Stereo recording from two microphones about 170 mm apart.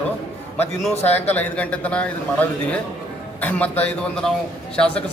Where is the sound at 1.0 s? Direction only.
10° left (ahead or behind).